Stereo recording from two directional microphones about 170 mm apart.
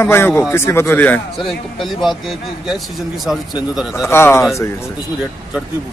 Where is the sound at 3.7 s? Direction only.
5° right (ahead or behind).